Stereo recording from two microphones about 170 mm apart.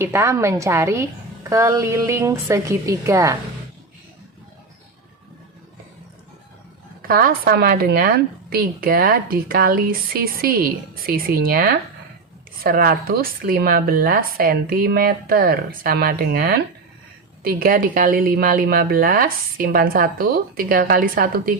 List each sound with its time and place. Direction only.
0.0 s a woman's voice: 15° right (ahead or behind)
7.1 s a woman's voice: 55° right (ahead or behind)